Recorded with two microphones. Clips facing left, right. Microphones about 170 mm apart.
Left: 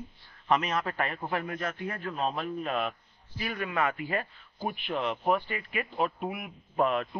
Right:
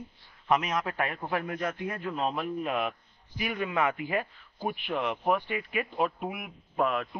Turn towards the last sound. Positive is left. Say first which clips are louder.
# left 1 dB
turn(degrees=0)  # may be behind; listen again after turning